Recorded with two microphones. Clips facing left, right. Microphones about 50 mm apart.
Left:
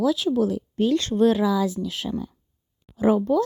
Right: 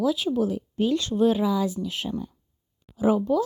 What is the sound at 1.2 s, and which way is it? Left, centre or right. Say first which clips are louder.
Speech: left 2 dB; left.